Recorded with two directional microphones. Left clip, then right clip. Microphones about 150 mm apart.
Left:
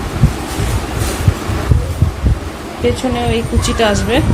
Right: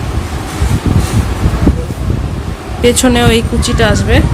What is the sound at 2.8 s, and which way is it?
Speech, 55° right (ahead or behind).